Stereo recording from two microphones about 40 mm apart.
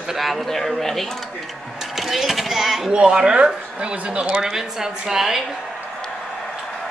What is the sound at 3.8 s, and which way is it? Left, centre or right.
Speech, right.